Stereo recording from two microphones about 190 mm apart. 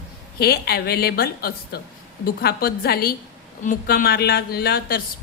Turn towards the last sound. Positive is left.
turn(degrees=55)  # may be behind; listen again after turning